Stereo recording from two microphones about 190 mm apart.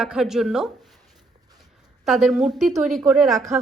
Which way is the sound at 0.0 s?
5° right (ahead or behind).